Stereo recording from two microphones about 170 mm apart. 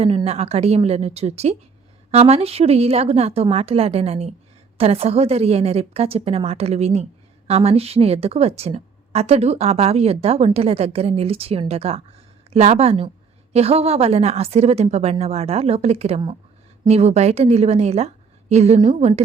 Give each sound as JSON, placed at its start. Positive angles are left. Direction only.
{"t": 0.3, "sound": "a woman's voice", "side_deg": -35}